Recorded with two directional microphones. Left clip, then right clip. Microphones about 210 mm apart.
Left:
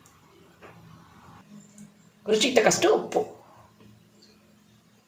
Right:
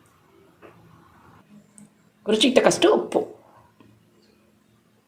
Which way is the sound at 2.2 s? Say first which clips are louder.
Right 3 dB; 35° right (ahead or behind).